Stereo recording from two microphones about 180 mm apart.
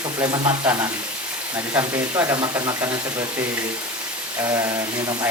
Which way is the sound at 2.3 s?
25° right (ahead or behind).